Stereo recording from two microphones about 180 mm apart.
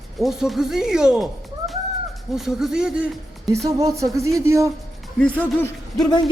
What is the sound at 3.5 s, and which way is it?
Speech, 20° right (ahead or behind).